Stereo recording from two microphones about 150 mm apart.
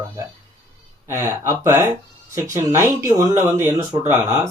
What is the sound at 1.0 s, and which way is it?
Speech, 15° right (ahead or behind).